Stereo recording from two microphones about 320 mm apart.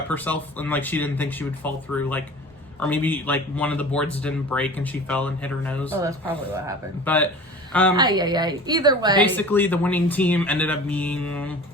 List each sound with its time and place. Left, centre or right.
0.1 s speech: centre
7.0 s speech: centre
7.9 s a woman's voice: centre
9.2 s speech: centre